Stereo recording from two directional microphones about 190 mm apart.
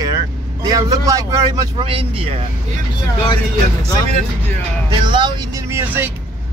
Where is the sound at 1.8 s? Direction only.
30° right (ahead or behind).